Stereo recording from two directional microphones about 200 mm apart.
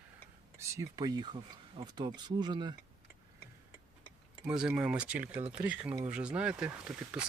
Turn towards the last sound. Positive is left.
turn(degrees=-5)  # may be behind; listen again after turning